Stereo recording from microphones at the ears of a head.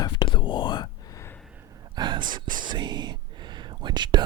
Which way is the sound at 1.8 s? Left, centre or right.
Right.